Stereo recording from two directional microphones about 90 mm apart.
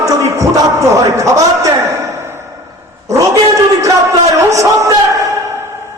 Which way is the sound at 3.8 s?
35° right (ahead or behind).